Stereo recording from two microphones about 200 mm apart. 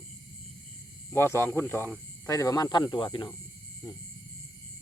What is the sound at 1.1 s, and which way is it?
Speech, 10° left (ahead or behind).